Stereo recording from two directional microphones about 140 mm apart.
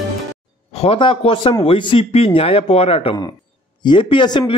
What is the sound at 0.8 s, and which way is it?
A man's voice, 40° left (ahead or behind).